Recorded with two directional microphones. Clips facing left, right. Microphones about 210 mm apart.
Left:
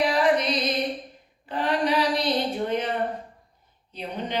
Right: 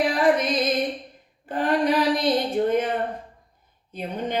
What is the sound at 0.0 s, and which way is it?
Music, 50° right (ahead or behind).